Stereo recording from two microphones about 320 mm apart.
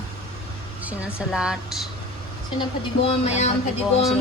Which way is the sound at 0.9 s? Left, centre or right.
Centre.